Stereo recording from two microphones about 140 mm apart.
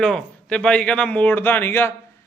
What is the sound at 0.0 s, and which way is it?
Speech, 5° left (ahead or behind).